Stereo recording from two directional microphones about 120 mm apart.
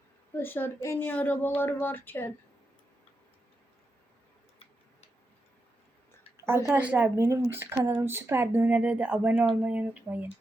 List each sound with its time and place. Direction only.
0.3 s a woman's voice: 15° left (ahead or behind)
6.3 s a sound: 20° right (ahead or behind)
6.7 s speech: 15° right (ahead or behind)